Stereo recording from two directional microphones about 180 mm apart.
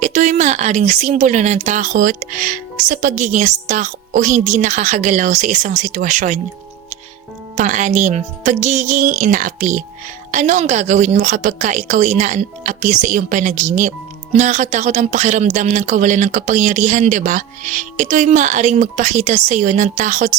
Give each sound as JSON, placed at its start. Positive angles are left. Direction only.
{"t": 0.0, "sound": "speech", "side_deg": -45}
{"t": 7.5, "sound": "speech", "side_deg": -45}